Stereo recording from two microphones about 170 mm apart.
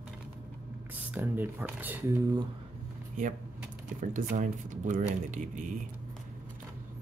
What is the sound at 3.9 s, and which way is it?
Speech, 50° right (ahead or behind).